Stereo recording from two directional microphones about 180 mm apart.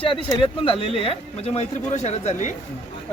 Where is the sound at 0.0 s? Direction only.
30° left (ahead or behind).